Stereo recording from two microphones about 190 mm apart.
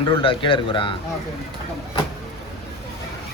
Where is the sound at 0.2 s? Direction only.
30° left (ahead or behind).